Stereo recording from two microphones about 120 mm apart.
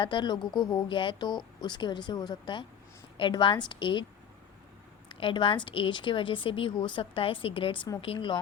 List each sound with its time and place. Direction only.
0.0 s speech: 40° left (ahead or behind)
5.0 s speech: 40° left (ahead or behind)